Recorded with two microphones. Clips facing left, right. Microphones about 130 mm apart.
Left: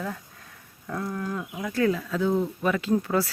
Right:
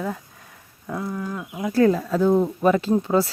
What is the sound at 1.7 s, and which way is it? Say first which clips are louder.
Speech: right 7 dB; 35° right (ahead or behind).